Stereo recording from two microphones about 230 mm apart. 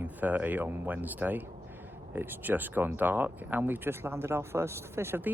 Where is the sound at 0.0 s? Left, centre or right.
Centre.